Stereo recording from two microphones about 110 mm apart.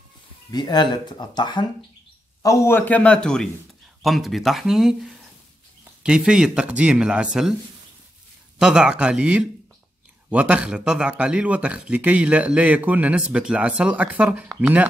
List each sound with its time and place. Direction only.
0.5 s speech: 40° left (ahead or behind)
2.4 s a man's voice: 25° left (ahead or behind); by 4.9 s 5° right (ahead or behind)
6.0 s speech: 5° right (ahead or behind)
8.5 s speech: 5° right (ahead or behind)